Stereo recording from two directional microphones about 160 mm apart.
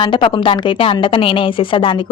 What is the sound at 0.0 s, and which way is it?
A woman's voice, 30° left (ahead or behind).